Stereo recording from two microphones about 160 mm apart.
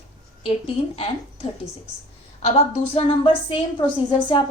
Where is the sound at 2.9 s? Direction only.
35° left (ahead or behind).